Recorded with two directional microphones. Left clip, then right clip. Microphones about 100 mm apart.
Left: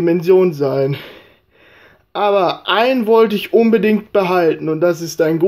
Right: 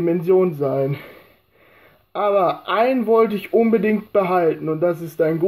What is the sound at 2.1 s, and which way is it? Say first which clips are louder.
Speech: left 3 dB; 45° left (ahead or behind).